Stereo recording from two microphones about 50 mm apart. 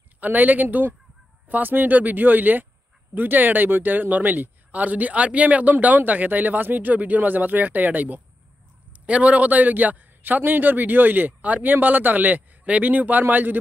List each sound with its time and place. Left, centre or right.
0.2 s a man's voice: right